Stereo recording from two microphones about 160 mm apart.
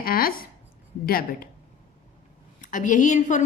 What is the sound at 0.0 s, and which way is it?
A woman's voice, 65° left (ahead or behind).